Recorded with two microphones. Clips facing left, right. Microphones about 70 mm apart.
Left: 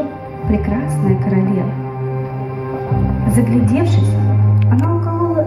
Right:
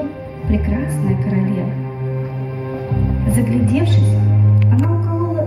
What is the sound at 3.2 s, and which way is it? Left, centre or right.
Speech, centre.